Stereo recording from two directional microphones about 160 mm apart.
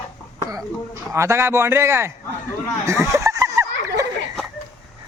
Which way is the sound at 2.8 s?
20° right (ahead or behind).